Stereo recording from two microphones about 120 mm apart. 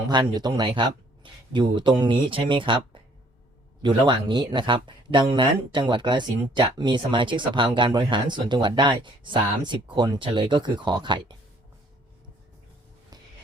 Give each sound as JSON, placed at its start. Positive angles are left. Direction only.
{"t": 0.1, "sound": "speech", "side_deg": -35}